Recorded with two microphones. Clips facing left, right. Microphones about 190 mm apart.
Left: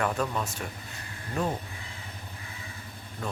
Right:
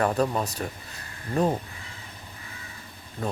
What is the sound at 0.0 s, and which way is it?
Speech, 35° right (ahead or behind).